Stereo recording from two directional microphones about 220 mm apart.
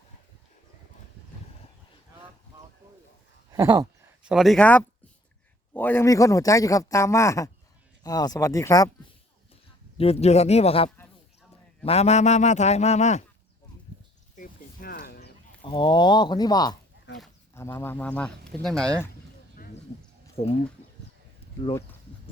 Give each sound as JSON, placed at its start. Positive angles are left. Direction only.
{"t": 3.5, "sound": "a sound", "side_deg": -15}
{"t": 4.2, "sound": "a man's voice", "side_deg": -5}
{"t": 10.0, "sound": "a man's voice", "side_deg": 25}
{"t": 14.3, "sound": "a sound", "side_deg": 40}
{"t": 15.6, "sound": "a man's voice", "side_deg": 20}
{"t": 20.4, "sound": "speech", "side_deg": 45}